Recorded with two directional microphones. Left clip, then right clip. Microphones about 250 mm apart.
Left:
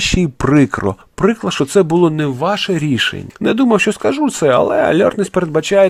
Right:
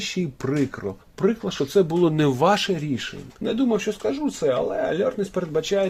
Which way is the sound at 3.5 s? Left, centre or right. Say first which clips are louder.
Left 10 dB; left.